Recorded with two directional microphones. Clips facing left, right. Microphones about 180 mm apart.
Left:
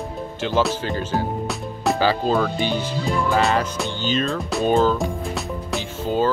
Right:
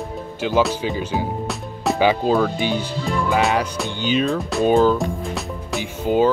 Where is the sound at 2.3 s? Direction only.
5° right (ahead or behind).